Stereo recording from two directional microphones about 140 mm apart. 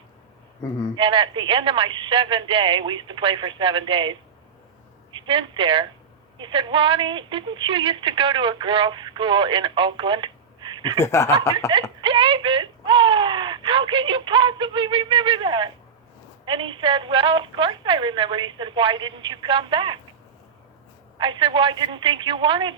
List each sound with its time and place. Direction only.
0.9 s a woman's voice: 35° right (ahead or behind)
10.9 s speech: 20° left (ahead or behind)
11.9 s a woman's voice: 35° right (ahead or behind)
21.2 s a woman's voice: 35° right (ahead or behind)